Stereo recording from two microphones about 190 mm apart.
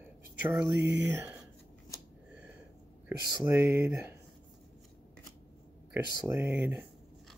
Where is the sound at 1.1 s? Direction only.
10° right (ahead or behind).